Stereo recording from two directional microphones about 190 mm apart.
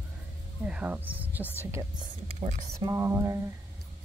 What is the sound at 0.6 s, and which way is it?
Speech, 5° right (ahead or behind).